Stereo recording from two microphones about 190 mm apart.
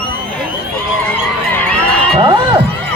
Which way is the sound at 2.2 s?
30° right (ahead or behind).